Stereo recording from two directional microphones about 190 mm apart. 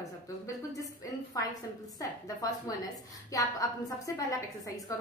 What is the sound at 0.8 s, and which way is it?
A woman's voice, 15° left (ahead or behind).